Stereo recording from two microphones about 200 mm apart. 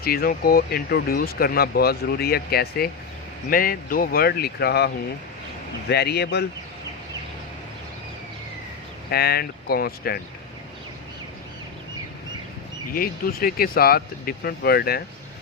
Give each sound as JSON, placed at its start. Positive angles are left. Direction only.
{"t": 0.0, "sound": "speech", "side_deg": 50}
{"t": 5.9, "sound": "speech", "side_deg": 55}
{"t": 9.0, "sound": "speech", "side_deg": 50}
{"t": 12.9, "sound": "speech", "side_deg": 45}